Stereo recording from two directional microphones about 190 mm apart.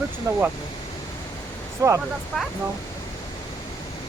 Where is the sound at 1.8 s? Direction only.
15° right (ahead or behind).